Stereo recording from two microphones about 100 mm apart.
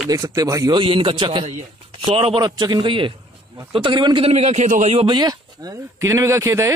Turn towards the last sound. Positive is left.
turn(degrees=-30)  # may be behind; listen again after turning